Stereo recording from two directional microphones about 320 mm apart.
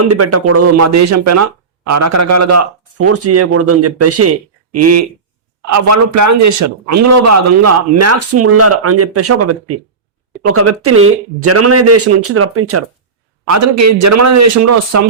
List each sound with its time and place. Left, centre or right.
0.0 s speech: right
13.5 s a man's voice: right